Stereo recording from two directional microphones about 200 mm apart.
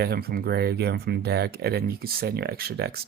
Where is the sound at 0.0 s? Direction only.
50° right (ahead or behind).